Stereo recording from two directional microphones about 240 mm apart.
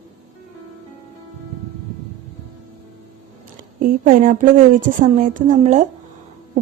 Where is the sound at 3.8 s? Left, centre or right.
Right.